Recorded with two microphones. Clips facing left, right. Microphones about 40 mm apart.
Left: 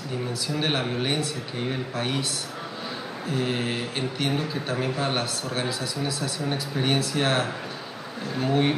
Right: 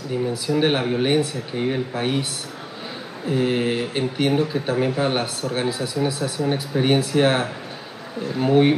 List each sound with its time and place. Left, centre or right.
0.3 s speech: centre
3.3 s speech: centre